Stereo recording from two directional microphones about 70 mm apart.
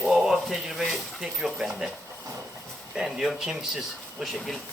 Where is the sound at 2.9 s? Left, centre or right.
Centre.